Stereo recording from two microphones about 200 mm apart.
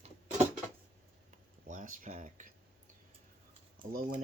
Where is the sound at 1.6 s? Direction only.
40° right (ahead or behind).